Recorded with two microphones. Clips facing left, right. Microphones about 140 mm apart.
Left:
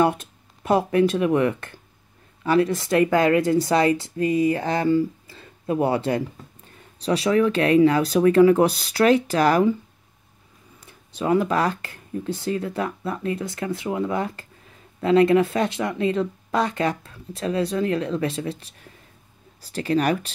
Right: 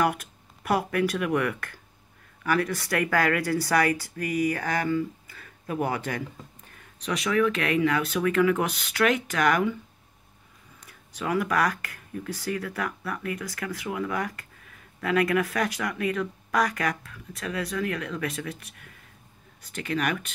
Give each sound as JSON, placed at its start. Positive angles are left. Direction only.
{"t": 0.0, "sound": "speech", "side_deg": 25}
{"t": 10.9, "sound": "speech", "side_deg": 25}